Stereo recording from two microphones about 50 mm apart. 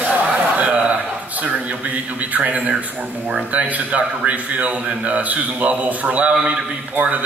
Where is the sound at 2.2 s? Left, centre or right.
Right.